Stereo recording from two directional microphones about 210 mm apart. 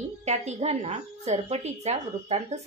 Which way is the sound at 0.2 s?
30° right (ahead or behind).